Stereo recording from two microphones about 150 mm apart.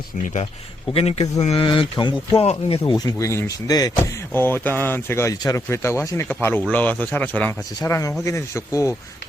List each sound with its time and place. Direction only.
0.9 s speech: 45° left (ahead or behind); by 7.5 s 10° left (ahead or behind)
7.8 s speech: 20° left (ahead or behind)